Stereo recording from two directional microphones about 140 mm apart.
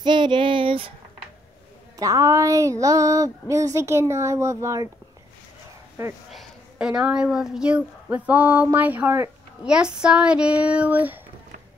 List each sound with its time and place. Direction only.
0.0 s speech: 35° right (ahead or behind)
2.0 s speech: 25° right (ahead or behind)
6.3 s a woman's voice: centre (ahead or behind)
9.7 s speech: 5° right (ahead or behind)